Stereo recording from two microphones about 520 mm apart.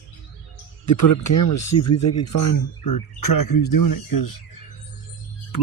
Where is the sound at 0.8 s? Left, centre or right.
Left.